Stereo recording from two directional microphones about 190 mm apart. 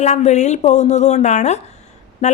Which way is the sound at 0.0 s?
35° left (ahead or behind).